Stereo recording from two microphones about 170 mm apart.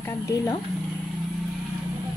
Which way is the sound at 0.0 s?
20° left (ahead or behind).